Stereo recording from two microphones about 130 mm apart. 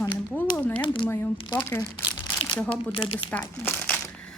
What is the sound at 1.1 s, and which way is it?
Speech, 15° left (ahead or behind).